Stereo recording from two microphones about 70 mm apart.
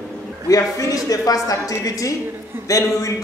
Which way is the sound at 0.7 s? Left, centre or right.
Left.